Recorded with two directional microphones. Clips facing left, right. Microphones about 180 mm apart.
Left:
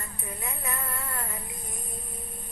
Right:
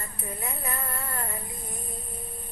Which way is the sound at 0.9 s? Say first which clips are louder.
Right 1 dB; 45° right (ahead or behind).